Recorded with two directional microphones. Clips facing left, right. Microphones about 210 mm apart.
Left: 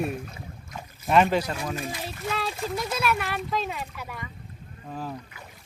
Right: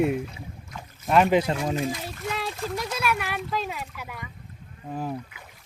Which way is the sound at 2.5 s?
5° left (ahead or behind).